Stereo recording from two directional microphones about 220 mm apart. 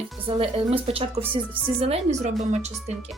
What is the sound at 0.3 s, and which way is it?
Speech, 25° right (ahead or behind).